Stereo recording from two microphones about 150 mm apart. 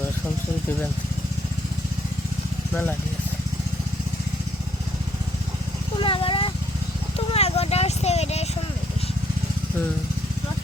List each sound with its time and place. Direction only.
6.0 s speech: 35° left (ahead or behind)
7.3 s vehicle: 45° left (ahead or behind)